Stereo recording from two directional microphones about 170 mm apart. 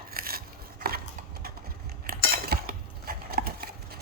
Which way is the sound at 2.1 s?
60° right (ahead or behind).